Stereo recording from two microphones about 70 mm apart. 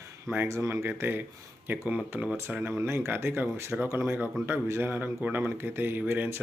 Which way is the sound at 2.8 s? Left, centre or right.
Right.